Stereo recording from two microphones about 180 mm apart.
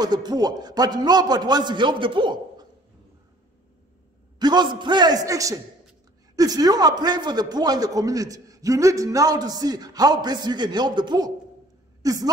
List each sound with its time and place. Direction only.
0.0 s a man's voice: 20° right (ahead or behind)
4.4 s a man's voice: 25° right (ahead or behind)